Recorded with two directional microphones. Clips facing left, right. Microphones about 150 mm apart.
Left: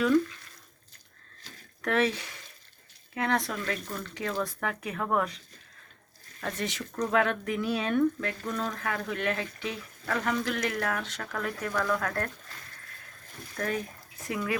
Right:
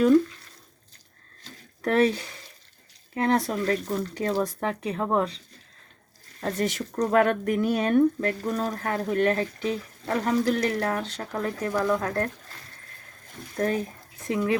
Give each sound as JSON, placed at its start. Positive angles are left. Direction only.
{"t": 1.8, "sound": "speech", "side_deg": -35}
{"t": 6.4, "sound": "speech", "side_deg": -45}
{"t": 13.6, "sound": "speech", "side_deg": -30}